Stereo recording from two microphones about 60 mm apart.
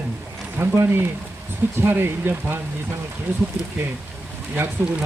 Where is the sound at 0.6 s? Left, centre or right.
Right.